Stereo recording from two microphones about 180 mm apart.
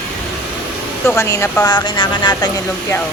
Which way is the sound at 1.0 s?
15° left (ahead or behind).